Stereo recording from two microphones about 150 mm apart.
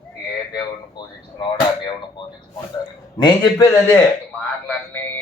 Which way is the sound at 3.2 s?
25° left (ahead or behind).